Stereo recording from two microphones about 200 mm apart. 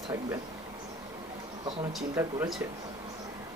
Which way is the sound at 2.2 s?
10° right (ahead or behind).